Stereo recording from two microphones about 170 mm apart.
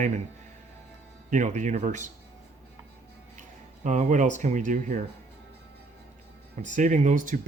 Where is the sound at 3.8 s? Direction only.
45° right (ahead or behind).